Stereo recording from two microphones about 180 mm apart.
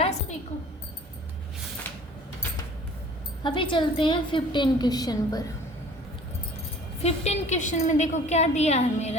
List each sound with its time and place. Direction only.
0.0 s a sound: 40° left (ahead or behind)
3.4 s a woman's voice: 25° left (ahead or behind)
7.0 s a woman's voice: 40° left (ahead or behind)